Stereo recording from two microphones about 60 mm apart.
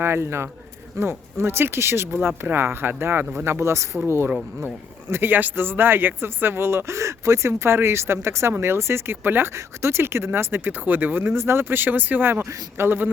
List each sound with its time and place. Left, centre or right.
0.0 s speech: right